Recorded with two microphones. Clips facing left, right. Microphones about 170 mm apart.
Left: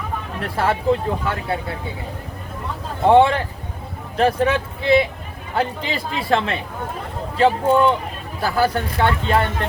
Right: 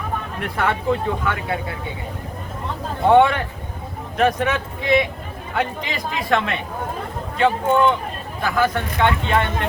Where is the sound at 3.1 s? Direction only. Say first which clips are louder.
Left 1 dB; 30° left (ahead or behind).